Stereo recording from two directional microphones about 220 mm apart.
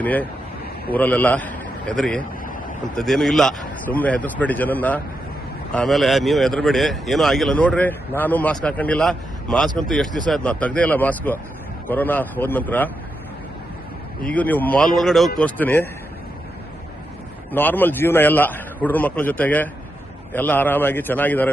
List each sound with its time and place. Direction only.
0.0 s a man's voice: 5° left (ahead or behind)
14.2 s a man's voice: 5° left (ahead or behind)
17.5 s a man's voice: 10° left (ahead or behind)